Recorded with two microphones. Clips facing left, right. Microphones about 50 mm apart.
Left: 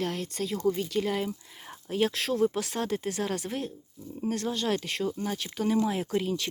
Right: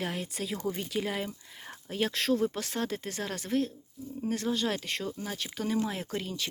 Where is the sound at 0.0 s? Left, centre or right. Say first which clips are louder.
Left 3 dB; centre.